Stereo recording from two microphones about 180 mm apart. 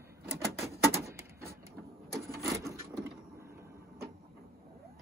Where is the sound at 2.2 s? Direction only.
15° right (ahead or behind).